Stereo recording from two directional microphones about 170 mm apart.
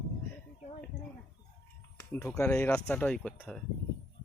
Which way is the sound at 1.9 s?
10° left (ahead or behind).